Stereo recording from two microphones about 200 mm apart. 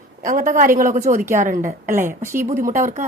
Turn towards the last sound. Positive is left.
turn(degrees=-40)  # may be behind; listen again after turning